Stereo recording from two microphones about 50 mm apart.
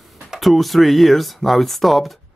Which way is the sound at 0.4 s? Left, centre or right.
Centre.